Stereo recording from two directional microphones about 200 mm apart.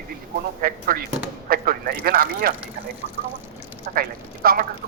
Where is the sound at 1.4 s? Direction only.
50° right (ahead or behind).